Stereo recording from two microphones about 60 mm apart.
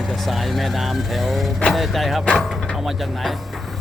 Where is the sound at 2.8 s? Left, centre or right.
Centre.